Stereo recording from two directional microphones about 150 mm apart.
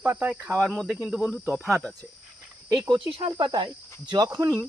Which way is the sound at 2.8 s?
35° right (ahead or behind).